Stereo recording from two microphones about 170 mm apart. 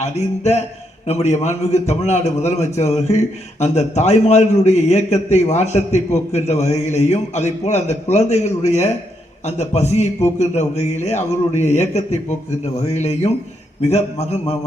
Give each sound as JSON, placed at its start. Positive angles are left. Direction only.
{"t": 0.0, "sound": "a man's voice", "side_deg": 40}